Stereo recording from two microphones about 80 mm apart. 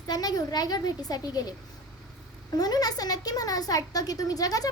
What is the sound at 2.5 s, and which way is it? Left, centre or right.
Speech, left.